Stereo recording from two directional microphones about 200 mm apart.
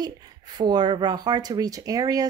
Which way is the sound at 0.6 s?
20° right (ahead or behind).